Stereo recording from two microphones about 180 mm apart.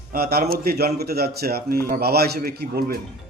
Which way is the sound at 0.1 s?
55° right (ahead or behind).